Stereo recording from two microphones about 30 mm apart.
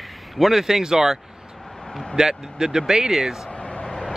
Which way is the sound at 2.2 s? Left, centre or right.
Centre.